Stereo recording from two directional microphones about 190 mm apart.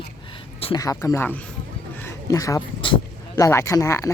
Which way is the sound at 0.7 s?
15° left (ahead or behind).